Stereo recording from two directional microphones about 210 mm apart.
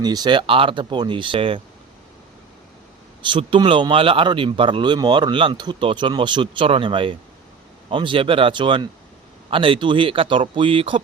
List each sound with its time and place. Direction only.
0.0 s speech: 20° right (ahead or behind)
3.2 s speech: 25° right (ahead or behind)